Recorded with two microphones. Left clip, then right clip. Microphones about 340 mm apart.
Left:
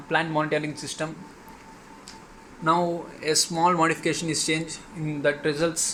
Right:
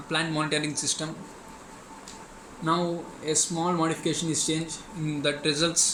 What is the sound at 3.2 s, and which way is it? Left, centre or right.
Speech, left.